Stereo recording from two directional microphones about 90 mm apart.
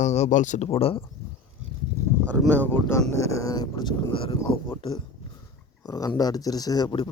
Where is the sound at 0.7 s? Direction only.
90° left.